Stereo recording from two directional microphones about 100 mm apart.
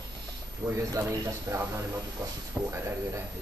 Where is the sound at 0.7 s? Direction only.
35° right (ahead or behind).